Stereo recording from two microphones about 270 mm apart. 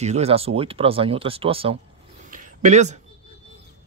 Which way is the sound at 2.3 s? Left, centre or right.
Right.